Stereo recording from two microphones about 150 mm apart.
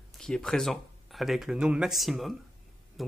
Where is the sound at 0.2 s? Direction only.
5° left (ahead or behind).